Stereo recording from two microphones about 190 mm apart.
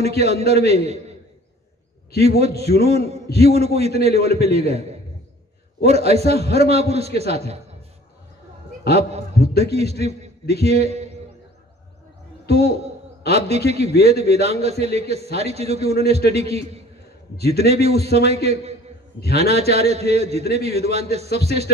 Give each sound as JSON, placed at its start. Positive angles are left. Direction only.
{"t": 0.0, "sound": "a man's voice", "side_deg": -35}
{"t": 2.1, "sound": "a man's voice", "side_deg": -35}
{"t": 5.9, "sound": "a man's voice", "side_deg": -35}
{"t": 9.6, "sound": "a man's voice", "side_deg": -35}
{"t": 12.4, "sound": "a man's voice", "side_deg": -35}